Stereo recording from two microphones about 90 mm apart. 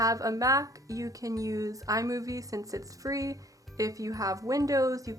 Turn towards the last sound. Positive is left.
turn(degrees=-40)  # may be behind; listen again after turning